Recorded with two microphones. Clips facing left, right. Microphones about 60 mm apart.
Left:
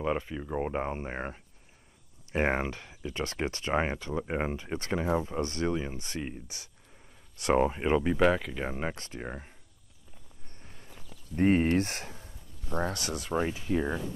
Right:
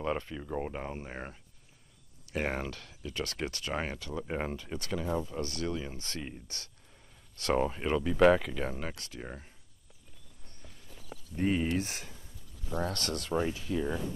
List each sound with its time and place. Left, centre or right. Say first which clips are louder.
0.0 s speech: left 3 dB; centre
8.2 s speech: right 2 dB; centre
8.5 s speech: left 2 dB; left
10.6 s horse: left 2 dB; left
11.3 s a sound: left 5 dB; left
12.9 s speech: left 1 dB; centre
13.4 s speech: left 4 dB; left